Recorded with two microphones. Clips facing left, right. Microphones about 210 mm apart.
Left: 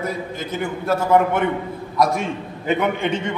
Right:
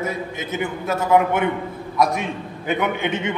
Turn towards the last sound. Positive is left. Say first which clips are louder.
# left 1 dB
turn(degrees=0)  # may be behind; listen again after turning